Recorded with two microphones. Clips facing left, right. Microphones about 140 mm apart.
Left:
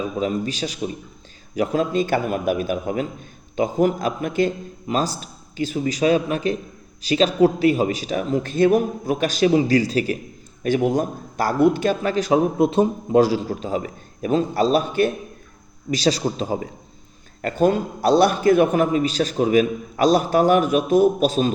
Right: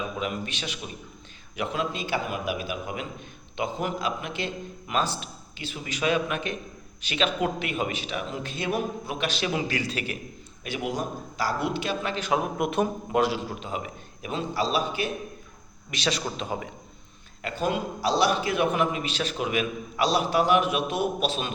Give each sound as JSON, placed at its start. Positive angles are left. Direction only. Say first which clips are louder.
{"t": 0.2, "sound": "a man's voice", "louder": "left 8 dB", "side_deg": 35}
{"t": 15.9, "sound": "speech", "louder": "left 9 dB", "side_deg": 35}
{"t": 17.4, "sound": "a man's voice", "louder": "left 9 dB", "side_deg": 50}